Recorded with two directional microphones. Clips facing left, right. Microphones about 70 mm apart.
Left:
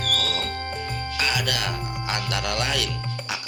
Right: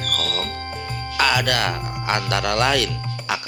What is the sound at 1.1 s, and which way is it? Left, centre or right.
Speech, right.